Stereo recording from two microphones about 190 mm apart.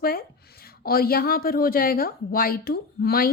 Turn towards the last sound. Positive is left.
turn(degrees=55)  # may be behind; listen again after turning